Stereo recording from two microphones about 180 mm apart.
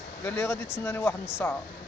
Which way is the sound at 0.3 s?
15° left (ahead or behind).